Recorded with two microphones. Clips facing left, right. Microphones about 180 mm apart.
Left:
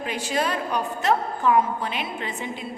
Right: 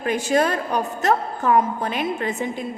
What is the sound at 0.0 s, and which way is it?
A woman's voice, 50° right (ahead or behind).